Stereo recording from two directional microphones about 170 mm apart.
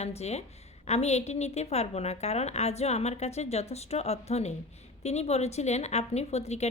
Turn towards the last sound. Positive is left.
turn(degrees=40)  # may be behind; listen again after turning